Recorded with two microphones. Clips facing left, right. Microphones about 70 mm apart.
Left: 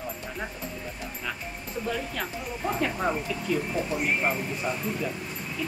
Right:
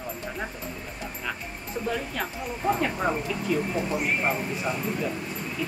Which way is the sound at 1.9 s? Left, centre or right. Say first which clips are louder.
Right 1 dB; centre.